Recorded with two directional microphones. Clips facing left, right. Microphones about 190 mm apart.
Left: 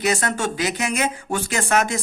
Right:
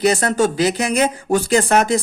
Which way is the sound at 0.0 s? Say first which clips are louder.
Right 6 dB; 35° right (ahead or behind).